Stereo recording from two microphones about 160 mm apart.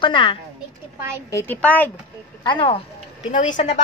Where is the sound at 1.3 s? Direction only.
15° left (ahead or behind).